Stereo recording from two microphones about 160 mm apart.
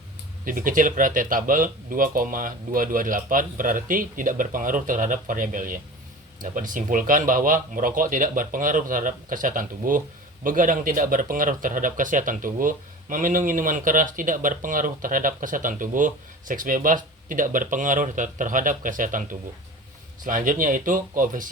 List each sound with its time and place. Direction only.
0.4 s speech: 60° right (ahead or behind)